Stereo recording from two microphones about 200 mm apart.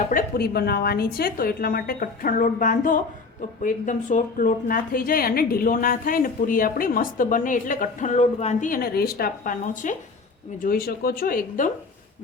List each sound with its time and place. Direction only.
0.1 s a woman's voice: 45° left (ahead or behind)